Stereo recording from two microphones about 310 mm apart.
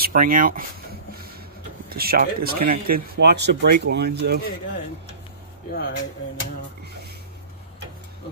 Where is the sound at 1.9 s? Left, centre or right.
Right.